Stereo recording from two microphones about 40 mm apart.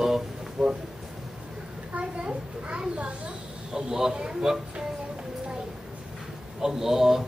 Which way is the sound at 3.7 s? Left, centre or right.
Centre.